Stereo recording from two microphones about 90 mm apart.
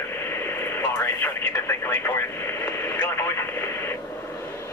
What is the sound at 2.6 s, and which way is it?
Radio, 25° left (ahead or behind).